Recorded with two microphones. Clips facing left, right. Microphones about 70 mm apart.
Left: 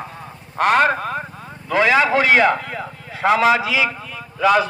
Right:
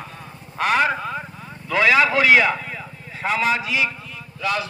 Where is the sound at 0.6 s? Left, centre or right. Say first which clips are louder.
Left 4 dB; left.